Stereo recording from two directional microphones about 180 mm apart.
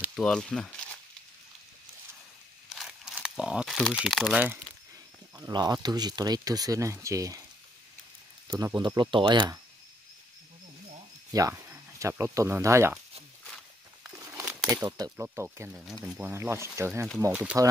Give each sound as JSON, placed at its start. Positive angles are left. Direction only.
{"t": 0.0, "sound": "speech", "side_deg": 0}
{"t": 2.7, "sound": "crumpling", "side_deg": 0}
{"t": 5.4, "sound": "speech", "side_deg": -20}
{"t": 8.5, "sound": "speech", "side_deg": -20}
{"t": 11.3, "sound": "speech", "side_deg": -15}
{"t": 14.0, "sound": "speech", "side_deg": -10}